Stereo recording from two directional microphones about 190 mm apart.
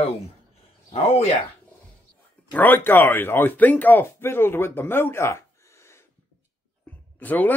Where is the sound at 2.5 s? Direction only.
10° left (ahead or behind).